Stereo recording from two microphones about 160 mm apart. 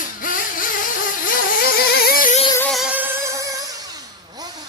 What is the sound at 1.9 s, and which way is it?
Music, 70° left (ahead or behind).